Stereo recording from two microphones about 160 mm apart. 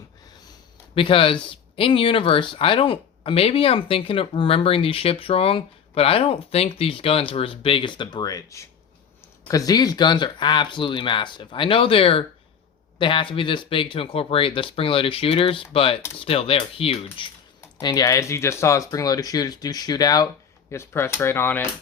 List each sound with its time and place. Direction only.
0.9 s speech: 35° left (ahead or behind); by 21.7 s 15° left (ahead or behind)